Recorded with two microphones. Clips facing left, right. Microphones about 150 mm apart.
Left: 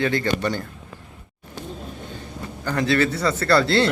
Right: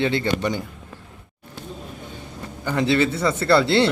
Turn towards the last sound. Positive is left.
turn(degrees=-25)  # may be behind; listen again after turning